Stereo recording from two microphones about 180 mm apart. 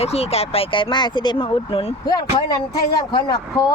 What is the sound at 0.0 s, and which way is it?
Speech, 35° left (ahead or behind).